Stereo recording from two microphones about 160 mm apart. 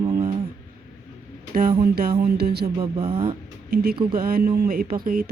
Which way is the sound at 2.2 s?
75° right (ahead or behind).